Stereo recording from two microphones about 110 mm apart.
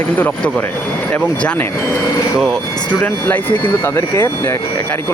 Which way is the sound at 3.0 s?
15° left (ahead or behind).